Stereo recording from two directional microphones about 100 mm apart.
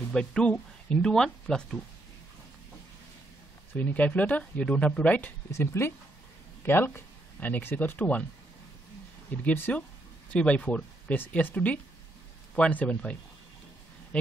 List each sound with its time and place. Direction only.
0.1 s speech: 10° left (ahead or behind)
3.7 s speech: 15° left (ahead or behind)
5.5 s speech: 25° left (ahead or behind)
9.3 s speech: 15° left (ahead or behind)